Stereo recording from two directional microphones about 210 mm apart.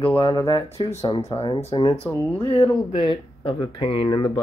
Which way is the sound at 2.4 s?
25° left (ahead or behind).